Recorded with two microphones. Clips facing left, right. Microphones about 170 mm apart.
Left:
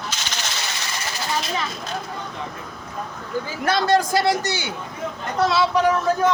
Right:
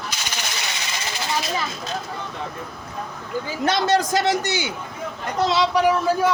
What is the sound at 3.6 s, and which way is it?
A man's voice, 20° right (ahead or behind).